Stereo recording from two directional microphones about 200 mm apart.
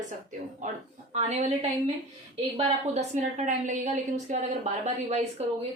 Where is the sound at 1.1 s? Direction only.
35° right (ahead or behind).